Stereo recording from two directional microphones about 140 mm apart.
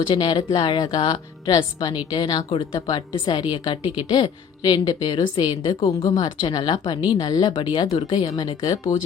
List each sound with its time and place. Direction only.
0.1 s speech: 35° left (ahead or behind)
8.0 s speech: 25° left (ahead or behind)